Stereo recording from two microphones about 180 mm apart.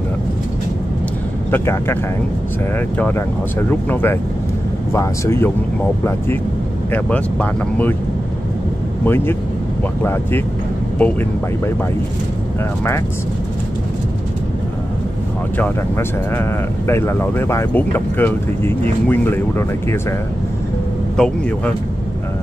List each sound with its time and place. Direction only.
1.5 s speech: 15° left (ahead or behind)
3.9 s speech: 10° left (ahead or behind)
6.9 s speech: 5° left (ahead or behind)
9.0 s speech: 10° left (ahead or behind)
11.0 s speech: 10° left (ahead or behind)
15.5 s speech: 10° left (ahead or behind)
21.2 s speech: 5° left (ahead or behind)